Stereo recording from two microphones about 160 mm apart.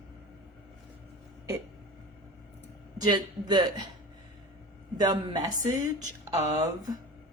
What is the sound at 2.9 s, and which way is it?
Speech, 25° right (ahead or behind).